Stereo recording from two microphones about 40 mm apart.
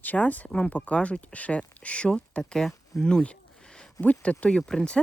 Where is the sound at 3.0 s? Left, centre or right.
Left.